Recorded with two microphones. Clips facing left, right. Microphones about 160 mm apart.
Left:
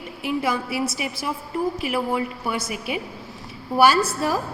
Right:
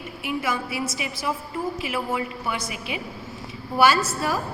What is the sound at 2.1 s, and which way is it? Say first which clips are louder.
A woman's voice: left 2 dB; 40° left (ahead or behind).